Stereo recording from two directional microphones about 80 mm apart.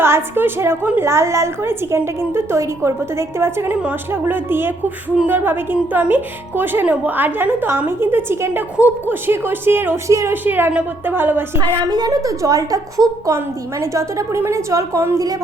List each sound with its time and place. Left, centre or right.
0.0 s a woman's voice: right
10.1 s a woman's voice: right
10.3 s a woman's voice: right
11.9 s a woman's voice: right
13.3 s a woman's voice: right